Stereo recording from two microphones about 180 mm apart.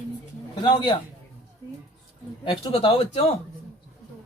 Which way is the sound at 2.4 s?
25° left (ahead or behind).